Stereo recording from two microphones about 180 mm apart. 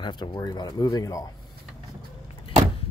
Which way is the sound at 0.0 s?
25° left (ahead or behind).